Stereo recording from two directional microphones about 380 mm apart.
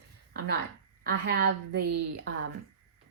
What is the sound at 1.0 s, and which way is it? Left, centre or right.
Speech, right.